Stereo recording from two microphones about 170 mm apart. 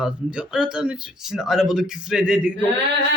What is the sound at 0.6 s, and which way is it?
Speech, 5° right (ahead or behind).